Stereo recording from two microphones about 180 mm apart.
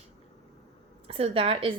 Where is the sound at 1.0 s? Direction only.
30° right (ahead or behind).